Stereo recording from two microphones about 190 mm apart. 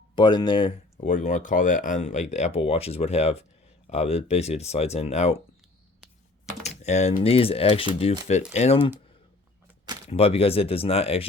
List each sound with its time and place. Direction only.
0.2 s speech: 25° left (ahead or behind)
1.0 s speech: 40° left (ahead or behind)
6.6 s speech: 35° left (ahead or behind)
10.1 s speech: 30° left (ahead or behind)